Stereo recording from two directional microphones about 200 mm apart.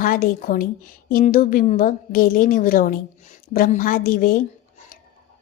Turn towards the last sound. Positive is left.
turn(degrees=45)  # may be behind; listen again after turning